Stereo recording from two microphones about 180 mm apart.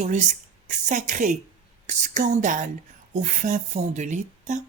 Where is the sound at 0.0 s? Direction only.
40° right (ahead or behind).